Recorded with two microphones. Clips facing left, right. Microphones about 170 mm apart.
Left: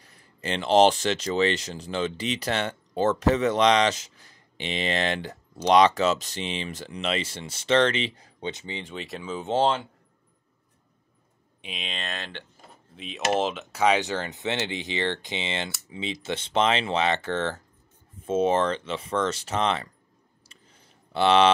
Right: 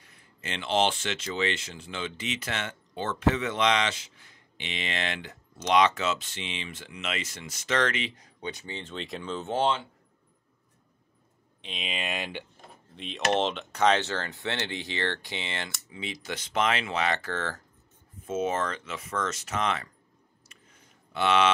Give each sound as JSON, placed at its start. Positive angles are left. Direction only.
{"t": 0.0, "sound": "speech", "side_deg": 35}
{"t": 11.6, "sound": "speech", "side_deg": 0}
{"t": 12.9, "sound": "speech", "side_deg": 0}
{"t": 20.4, "sound": "clicking", "side_deg": 30}